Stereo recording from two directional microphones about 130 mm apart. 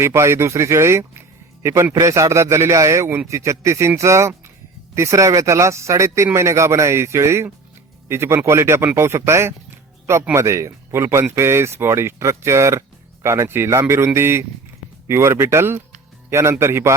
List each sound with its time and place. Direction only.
0.0 s a man's voice: 20° right (ahead or behind)